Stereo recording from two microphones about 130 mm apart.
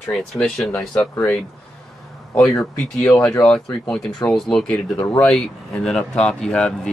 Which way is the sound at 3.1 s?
25° left (ahead or behind).